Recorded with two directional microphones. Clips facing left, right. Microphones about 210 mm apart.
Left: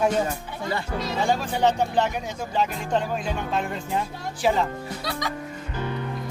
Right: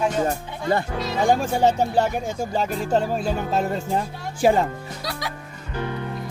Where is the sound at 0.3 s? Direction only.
50° right (ahead or behind).